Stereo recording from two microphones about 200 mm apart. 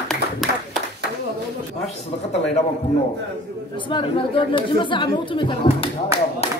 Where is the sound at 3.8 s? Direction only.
25° left (ahead or behind).